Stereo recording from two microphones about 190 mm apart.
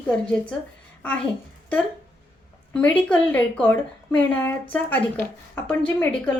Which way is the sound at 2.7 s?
5° left (ahead or behind).